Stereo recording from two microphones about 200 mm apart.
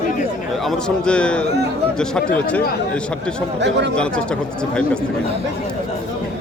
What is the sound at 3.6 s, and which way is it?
Speech, 60° right (ahead or behind).